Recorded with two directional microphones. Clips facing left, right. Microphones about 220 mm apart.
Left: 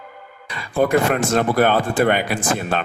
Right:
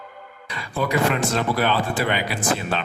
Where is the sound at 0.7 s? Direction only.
50° left (ahead or behind).